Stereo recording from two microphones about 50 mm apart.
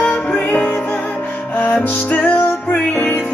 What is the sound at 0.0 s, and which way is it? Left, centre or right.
Music, left.